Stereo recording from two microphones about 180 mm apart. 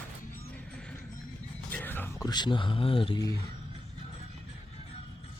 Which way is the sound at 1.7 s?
10° left (ahead or behind).